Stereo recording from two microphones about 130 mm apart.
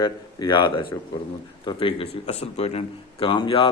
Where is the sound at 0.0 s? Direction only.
35° left (ahead or behind).